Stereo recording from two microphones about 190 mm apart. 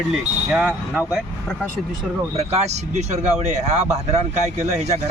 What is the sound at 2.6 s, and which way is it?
Speech, 35° right (ahead or behind).